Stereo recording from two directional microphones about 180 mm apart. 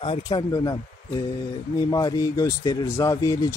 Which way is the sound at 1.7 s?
20° left (ahead or behind).